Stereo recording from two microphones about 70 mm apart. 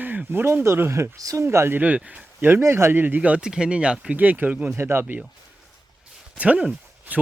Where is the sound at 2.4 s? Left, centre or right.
Right; by 4.1 s centre.